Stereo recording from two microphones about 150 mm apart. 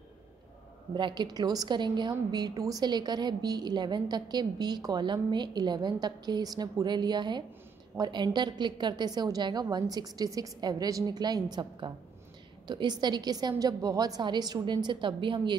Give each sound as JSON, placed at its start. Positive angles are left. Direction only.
{"t": 0.9, "sound": "a woman's voice", "side_deg": -30}
{"t": 12.6, "sound": "a woman's voice", "side_deg": -30}